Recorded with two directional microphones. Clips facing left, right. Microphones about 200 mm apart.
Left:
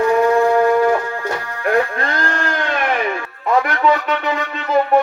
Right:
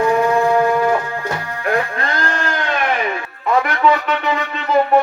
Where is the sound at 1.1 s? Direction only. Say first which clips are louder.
Even; 15° right (ahead or behind).